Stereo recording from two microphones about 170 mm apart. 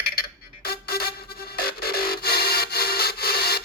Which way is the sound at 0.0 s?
65° left (ahead or behind).